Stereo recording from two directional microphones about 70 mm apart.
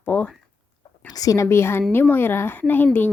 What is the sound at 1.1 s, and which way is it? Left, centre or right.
Speech, left.